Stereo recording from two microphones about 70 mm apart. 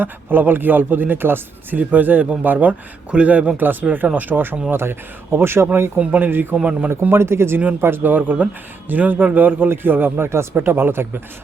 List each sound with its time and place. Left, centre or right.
0.0 s a man's voice: right
6.0 s speech: centre
7.0 s a man's voice: right